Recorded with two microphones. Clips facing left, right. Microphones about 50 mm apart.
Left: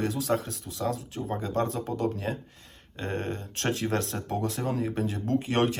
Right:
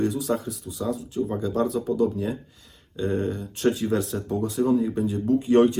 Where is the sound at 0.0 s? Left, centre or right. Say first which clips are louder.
Right 3 dB; left.